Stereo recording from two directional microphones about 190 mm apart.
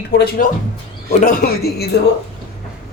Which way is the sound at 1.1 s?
40° left (ahead or behind).